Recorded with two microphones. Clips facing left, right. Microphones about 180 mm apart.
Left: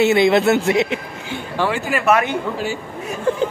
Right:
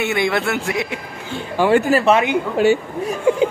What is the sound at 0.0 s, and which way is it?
Speech, 25° left (ahead or behind).